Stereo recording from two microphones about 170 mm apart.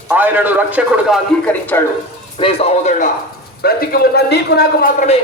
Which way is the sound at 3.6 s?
65° left (ahead or behind).